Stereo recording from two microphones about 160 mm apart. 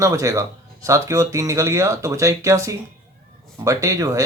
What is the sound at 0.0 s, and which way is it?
Speech, 20° right (ahead or behind).